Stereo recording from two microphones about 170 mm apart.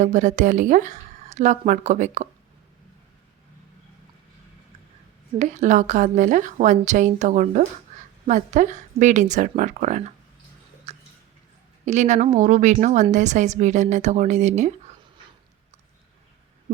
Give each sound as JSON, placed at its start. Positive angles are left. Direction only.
{"t": 0.0, "sound": "a woman's voice", "side_deg": -45}
{"t": 5.4, "sound": "a woman's voice", "side_deg": -45}
{"t": 10.9, "sound": "a sound", "side_deg": -35}
{"t": 11.9, "sound": "a woman's voice", "side_deg": -45}